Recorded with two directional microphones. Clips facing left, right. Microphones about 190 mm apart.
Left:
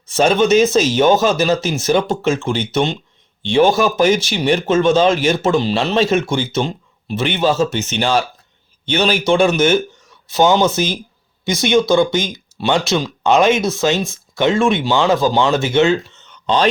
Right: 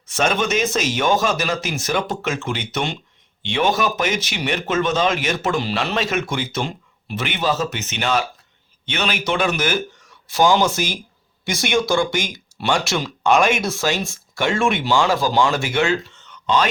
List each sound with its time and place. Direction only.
0.1 s speech: 30° left (ahead or behind)